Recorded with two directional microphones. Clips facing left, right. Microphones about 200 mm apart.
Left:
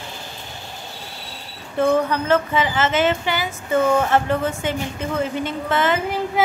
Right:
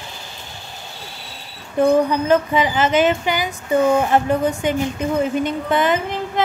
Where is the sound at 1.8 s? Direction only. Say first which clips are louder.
Right 3 dB; 15° right (ahead or behind).